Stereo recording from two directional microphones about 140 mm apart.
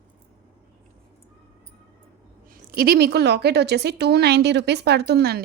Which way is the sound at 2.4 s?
90° right.